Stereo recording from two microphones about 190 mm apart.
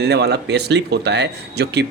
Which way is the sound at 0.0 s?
60° right (ahead or behind).